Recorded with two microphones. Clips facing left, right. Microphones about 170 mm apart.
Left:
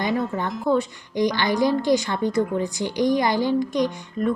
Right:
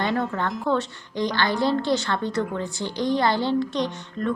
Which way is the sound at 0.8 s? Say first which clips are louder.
Left 4 dB; 15° left (ahead or behind).